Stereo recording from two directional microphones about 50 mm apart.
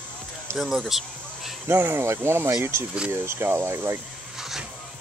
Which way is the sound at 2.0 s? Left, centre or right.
Right.